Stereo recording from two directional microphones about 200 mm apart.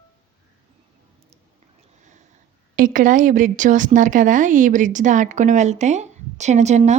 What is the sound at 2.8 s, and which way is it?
A woman's voice, 40° right (ahead or behind).